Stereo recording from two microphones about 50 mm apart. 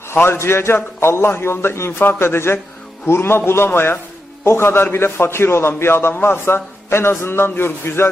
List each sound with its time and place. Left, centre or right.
0.1 s a man's voice: left